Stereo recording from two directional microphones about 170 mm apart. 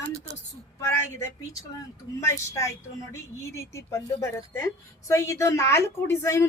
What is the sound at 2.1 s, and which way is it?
A woman's voice, 20° left (ahead or behind).